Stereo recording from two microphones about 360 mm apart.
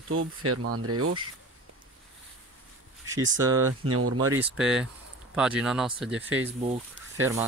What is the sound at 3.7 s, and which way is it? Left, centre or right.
Speech, right.